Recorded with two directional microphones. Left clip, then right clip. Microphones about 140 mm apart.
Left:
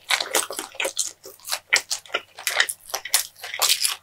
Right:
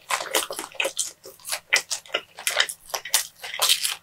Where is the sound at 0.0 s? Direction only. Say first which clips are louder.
Left 2 dB; 40° left (ahead or behind).